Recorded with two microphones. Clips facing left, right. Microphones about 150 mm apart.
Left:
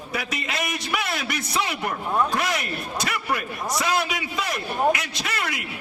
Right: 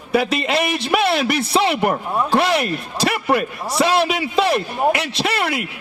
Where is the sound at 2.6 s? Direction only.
30° right (ahead or behind).